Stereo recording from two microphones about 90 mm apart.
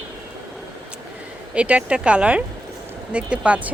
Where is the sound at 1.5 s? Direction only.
15° right (ahead or behind).